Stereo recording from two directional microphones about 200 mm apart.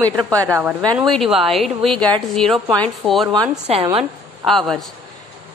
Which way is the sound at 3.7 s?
30° right (ahead or behind).